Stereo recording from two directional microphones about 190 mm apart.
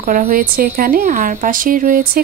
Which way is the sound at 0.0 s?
40° right (ahead or behind).